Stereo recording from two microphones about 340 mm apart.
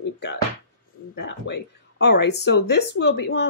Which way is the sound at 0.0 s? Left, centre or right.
Left.